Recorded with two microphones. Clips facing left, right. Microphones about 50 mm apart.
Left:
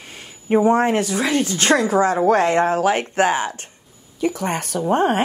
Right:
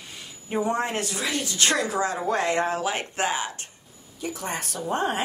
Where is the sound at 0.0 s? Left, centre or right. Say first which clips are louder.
Left 3 dB; left.